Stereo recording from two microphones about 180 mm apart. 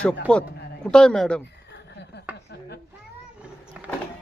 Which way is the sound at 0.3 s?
5° left (ahead or behind).